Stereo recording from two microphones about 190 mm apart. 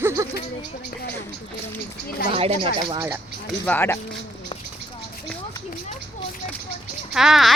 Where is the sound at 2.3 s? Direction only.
30° right (ahead or behind).